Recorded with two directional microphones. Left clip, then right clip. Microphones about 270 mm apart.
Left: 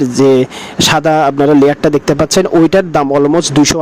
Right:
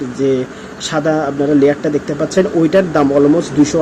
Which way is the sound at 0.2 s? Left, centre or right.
Left.